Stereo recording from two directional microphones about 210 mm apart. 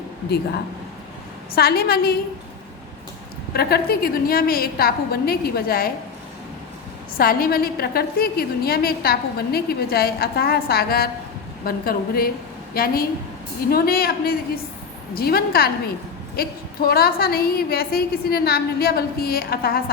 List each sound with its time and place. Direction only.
1.5 s a woman's voice: 45° left (ahead or behind)
3.5 s a woman's voice: 50° left (ahead or behind)
7.2 s a woman's voice: 45° left (ahead or behind)